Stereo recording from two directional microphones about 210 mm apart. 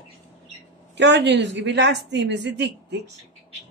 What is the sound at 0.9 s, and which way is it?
A woman's voice, 55° right (ahead or behind).